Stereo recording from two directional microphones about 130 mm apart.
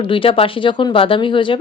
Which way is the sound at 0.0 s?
40° left (ahead or behind).